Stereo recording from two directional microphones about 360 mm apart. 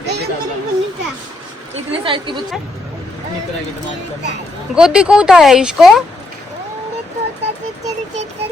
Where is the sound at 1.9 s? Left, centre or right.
Centre.